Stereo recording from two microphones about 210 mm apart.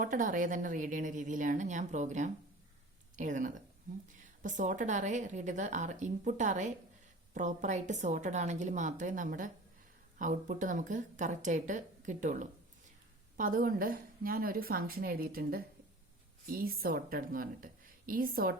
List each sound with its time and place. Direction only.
0.0 s a woman's voice: 40° right (ahead or behind)